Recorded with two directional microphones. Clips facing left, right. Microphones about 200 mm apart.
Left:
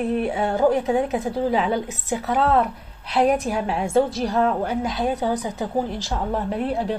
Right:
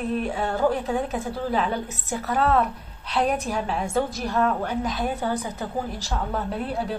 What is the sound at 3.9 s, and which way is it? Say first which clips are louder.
A woman's voice: left 7 dB; 30° left (ahead or behind).